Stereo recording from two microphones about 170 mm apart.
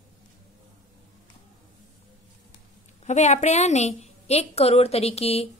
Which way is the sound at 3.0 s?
40° left (ahead or behind).